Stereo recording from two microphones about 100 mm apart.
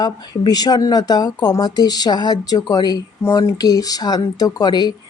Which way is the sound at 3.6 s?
40° left (ahead or behind).